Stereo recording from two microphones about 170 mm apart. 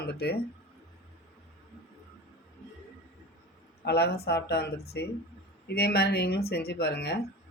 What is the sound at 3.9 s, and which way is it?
Speech, 75° left (ahead or behind).